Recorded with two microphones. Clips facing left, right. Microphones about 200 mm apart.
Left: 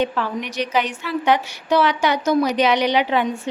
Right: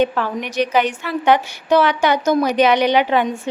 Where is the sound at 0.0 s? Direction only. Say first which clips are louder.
Right 3 dB; 50° right (ahead or behind).